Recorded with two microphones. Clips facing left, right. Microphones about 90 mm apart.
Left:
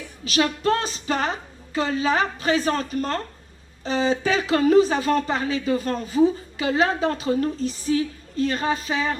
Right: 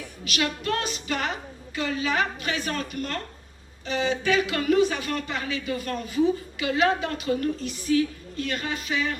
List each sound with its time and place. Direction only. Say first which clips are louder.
0.3 s speech: left 6 dB; 35° left (ahead or behind)